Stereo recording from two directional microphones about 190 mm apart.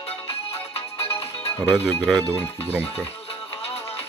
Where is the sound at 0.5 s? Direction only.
30° left (ahead or behind).